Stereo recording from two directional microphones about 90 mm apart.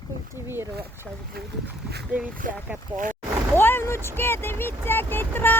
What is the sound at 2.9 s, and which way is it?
Speech, 15° right (ahead or behind).